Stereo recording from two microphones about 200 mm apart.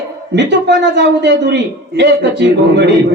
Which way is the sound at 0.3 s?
60° right (ahead or behind).